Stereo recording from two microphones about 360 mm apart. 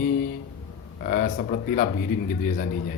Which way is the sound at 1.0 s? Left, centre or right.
Left.